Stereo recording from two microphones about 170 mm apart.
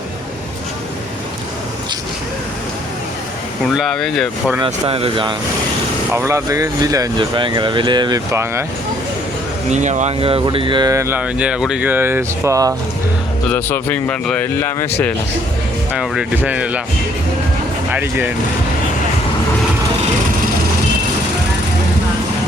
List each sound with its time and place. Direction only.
3.8 s speech: centre (ahead or behind)
4.6 s speech: 35° right (ahead or behind)
6.1 s speech: 15° right (ahead or behind)
9.6 s speech: 45° right (ahead or behind); by 12.7 s 20° right (ahead or behind)
13.5 s speech: 10° left (ahead or behind)
15.9 s speech: 5° right (ahead or behind)
17.9 s speech: 10° right (ahead or behind)